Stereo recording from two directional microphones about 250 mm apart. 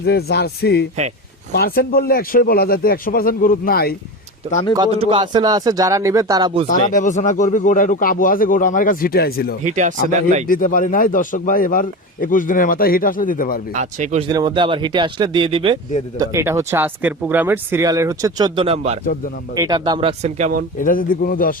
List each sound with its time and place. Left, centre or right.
0.0 s speech: left
4.7 s speech: centre
6.7 s speech: left
9.6 s speech: right
10.4 s speech: left
13.7 s speech: right
14.3 s speech: centre
20.7 s speech: left